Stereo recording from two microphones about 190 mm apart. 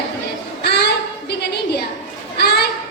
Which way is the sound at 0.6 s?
60° left (ahead or behind).